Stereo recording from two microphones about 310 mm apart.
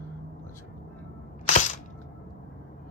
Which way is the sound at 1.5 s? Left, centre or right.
Left.